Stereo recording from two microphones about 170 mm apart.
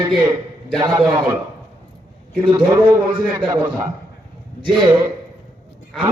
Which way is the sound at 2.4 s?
30° right (ahead or behind).